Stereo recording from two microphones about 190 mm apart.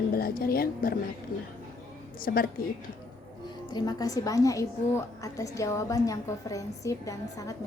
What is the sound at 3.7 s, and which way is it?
A woman's voice, 20° left (ahead or behind).